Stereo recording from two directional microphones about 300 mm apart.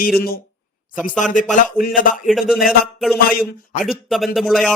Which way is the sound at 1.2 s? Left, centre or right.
Left.